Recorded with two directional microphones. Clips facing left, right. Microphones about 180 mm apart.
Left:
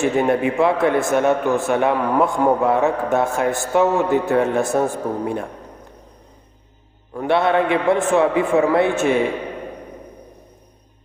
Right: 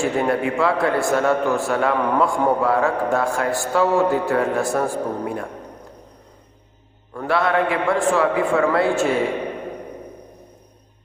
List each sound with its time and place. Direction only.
0.0 s a man's voice: 20° left (ahead or behind)
7.3 s a man's voice: 25° left (ahead or behind)